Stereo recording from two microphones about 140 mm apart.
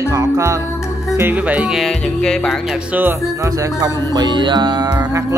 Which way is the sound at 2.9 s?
20° right (ahead or behind).